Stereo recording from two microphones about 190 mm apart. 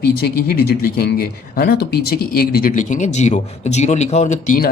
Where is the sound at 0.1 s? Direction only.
55° left (ahead or behind).